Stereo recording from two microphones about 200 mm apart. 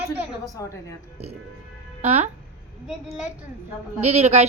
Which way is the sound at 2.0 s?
35° right (ahead or behind).